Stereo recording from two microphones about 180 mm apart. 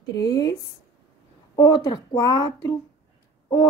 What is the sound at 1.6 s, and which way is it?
Speech, 25° left (ahead or behind).